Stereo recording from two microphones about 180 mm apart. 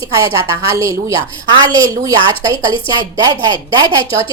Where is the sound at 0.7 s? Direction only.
15° right (ahead or behind).